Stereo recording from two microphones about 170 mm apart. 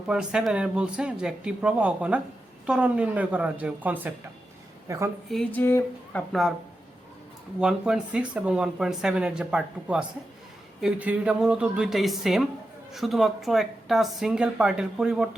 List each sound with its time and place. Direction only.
0.1 s a woman's voice: 5° right (ahead or behind)
5.3 s speech: 5° left (ahead or behind)
7.6 s speech: 5° right (ahead or behind)